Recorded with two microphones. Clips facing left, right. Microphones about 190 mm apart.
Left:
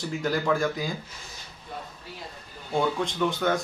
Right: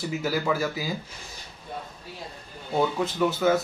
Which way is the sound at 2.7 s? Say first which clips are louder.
Right 1 dB; 5° right (ahead or behind).